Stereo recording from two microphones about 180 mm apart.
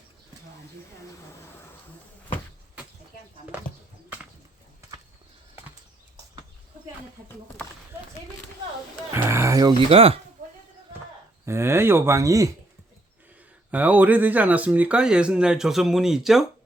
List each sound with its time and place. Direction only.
9.1 s a sound: 15° right (ahead or behind)
9.9 s speech: 30° right (ahead or behind)
11.4 s speech: 15° right (ahead or behind)
13.7 s speech: 10° right (ahead or behind)